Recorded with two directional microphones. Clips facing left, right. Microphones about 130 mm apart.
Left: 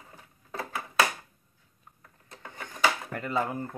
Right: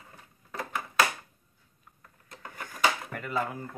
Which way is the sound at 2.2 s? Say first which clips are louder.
Even; 25° left (ahead or behind).